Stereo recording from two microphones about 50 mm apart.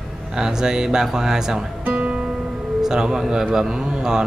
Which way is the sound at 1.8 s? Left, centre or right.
Right.